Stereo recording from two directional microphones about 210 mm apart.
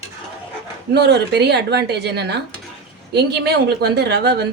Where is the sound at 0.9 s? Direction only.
50° right (ahead or behind).